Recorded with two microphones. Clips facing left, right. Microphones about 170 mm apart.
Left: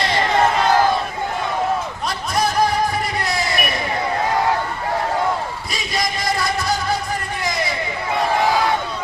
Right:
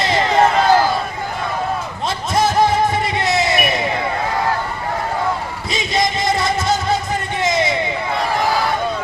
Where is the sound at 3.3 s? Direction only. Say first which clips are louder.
Right 5 dB; 25° right (ahead or behind).